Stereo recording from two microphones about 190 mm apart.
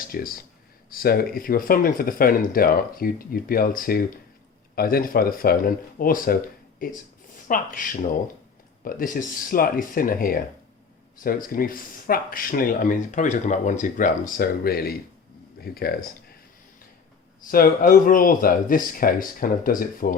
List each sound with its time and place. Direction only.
0.1 s speech: 50° left (ahead or behind)
17.5 s speech: 50° left (ahead or behind)